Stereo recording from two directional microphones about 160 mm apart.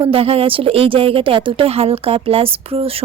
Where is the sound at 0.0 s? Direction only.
35° right (ahead or behind).